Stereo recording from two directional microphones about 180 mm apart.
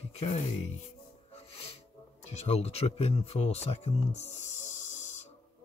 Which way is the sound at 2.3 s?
35° left (ahead or behind).